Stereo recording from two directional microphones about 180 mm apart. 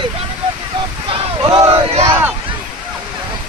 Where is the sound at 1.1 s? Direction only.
30° right (ahead or behind).